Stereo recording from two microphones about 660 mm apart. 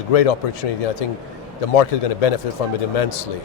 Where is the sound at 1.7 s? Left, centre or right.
Left.